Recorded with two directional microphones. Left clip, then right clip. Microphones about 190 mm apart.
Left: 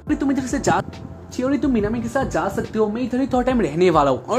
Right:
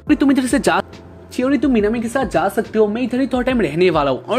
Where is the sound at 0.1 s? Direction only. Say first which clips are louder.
Right 7 dB; 30° right (ahead or behind).